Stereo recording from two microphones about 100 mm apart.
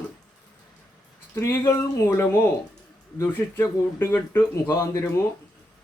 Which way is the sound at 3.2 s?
25° left (ahead or behind).